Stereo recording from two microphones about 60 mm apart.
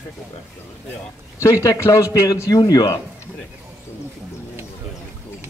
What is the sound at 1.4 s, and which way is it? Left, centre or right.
Speech, left.